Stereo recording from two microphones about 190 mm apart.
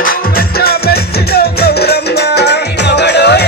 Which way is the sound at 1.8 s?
60° left (ahead or behind).